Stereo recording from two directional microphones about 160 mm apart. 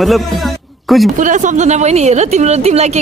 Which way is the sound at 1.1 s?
50° right (ahead or behind).